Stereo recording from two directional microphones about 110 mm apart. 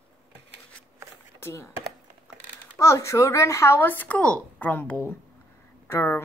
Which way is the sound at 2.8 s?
25° left (ahead or behind).